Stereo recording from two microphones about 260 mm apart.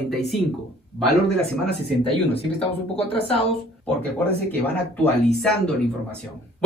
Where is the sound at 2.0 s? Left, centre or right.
Left.